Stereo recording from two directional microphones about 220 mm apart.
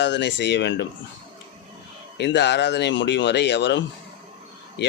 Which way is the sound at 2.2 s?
50° left (ahead or behind).